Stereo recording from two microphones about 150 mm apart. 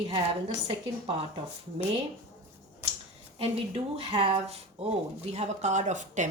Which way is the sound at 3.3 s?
40° right (ahead or behind).